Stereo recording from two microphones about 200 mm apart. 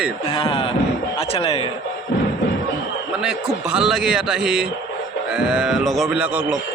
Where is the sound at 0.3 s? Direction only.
25° left (ahead or behind).